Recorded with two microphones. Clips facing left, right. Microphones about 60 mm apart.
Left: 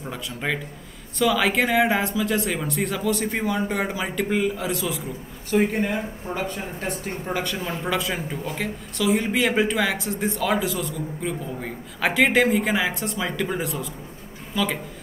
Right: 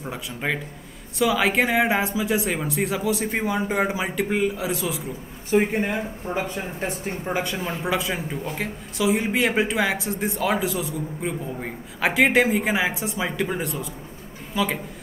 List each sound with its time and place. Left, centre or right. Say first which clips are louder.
0.0 s a man's voice: even; centre
5.5 s speech: right 1 dB; right
5.9 s a man's voice: even; centre
13.6 s speech: left 1 dB; centre